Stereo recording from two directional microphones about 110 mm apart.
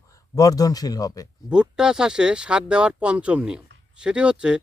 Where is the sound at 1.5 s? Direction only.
5° right (ahead or behind).